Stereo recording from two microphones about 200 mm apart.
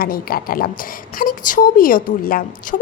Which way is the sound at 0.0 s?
50° left (ahead or behind).